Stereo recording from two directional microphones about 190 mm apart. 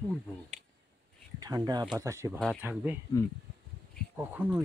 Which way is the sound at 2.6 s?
10° right (ahead or behind).